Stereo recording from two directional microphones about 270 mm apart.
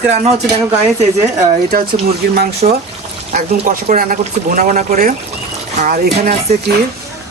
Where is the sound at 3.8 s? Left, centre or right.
Right.